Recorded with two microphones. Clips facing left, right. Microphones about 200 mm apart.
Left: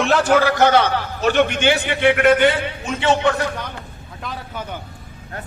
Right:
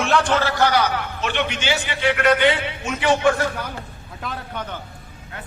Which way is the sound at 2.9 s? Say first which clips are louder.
Left 1 dB; 25° left (ahead or behind).